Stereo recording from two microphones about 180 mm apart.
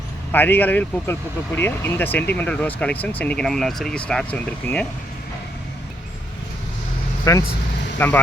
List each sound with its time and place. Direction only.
0.3 s speech: 10° left (ahead or behind)
7.3 s speech: 15° left (ahead or behind)